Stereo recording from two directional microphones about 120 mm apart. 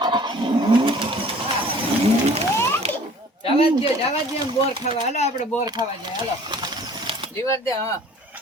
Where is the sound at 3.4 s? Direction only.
55° left (ahead or behind).